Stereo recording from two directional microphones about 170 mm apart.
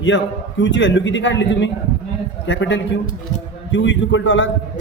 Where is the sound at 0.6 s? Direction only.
90° left.